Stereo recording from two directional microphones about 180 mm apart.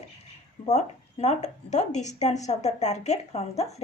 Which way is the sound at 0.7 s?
40° left (ahead or behind).